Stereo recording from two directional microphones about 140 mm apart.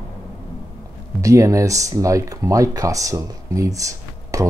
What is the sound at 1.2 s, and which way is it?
Speech, 25° right (ahead or behind).